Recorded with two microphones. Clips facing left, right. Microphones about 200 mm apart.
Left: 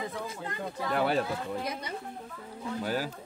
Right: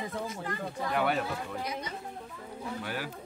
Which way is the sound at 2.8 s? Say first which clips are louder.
Left 8 dB; 35° left (ahead or behind).